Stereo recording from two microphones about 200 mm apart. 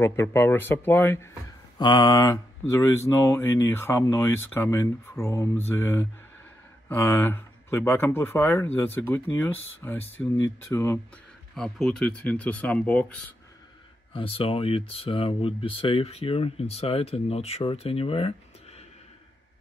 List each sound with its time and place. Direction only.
0.0 s speech: 10° left (ahead or behind)
14.1 s speech: 25° left (ahead or behind)